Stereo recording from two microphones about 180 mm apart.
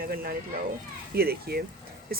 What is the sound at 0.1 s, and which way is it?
Speech, 55° right (ahead or behind).